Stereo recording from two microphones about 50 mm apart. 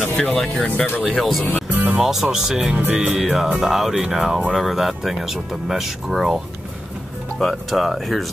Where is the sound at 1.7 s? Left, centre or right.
Right.